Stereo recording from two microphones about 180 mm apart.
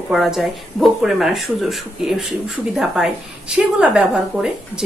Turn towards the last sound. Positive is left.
turn(degrees=-5)  # may be behind; listen again after turning